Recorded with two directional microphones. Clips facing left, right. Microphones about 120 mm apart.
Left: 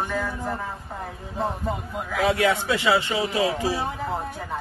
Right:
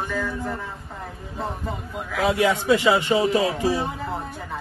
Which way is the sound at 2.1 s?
Centre (ahead or behind).